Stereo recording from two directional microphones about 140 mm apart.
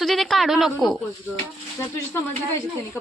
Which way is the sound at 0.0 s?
Centre (ahead or behind).